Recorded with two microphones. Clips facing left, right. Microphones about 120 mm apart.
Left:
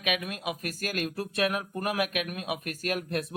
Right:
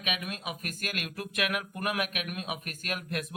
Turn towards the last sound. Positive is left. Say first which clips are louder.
# left 5 dB
turn(degrees=35)  # may be behind; listen again after turning